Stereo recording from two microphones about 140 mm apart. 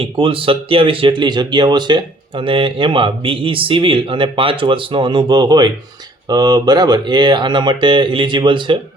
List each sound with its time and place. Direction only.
0.0 s speech: 40° right (ahead or behind)